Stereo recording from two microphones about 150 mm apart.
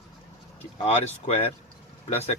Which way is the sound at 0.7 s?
45° left (ahead or behind).